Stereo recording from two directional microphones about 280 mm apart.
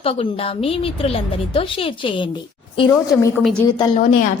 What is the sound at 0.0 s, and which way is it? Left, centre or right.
A woman's voice, centre.